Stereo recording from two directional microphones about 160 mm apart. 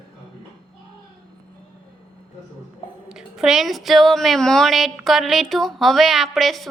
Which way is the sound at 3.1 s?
5° right (ahead or behind).